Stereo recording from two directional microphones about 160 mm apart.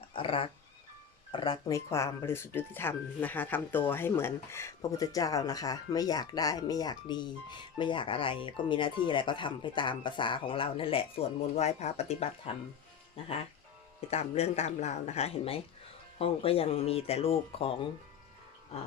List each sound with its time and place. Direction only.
0.1 s cat: 35° left (ahead or behind)
1.3 s speech: 30° left (ahead or behind)
14.1 s speech: 40° left (ahead or behind)